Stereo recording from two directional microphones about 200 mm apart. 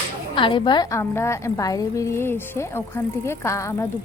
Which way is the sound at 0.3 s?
25° left (ahead or behind).